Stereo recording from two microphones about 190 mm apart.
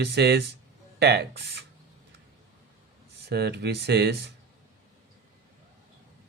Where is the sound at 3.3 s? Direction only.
60° right (ahead or behind).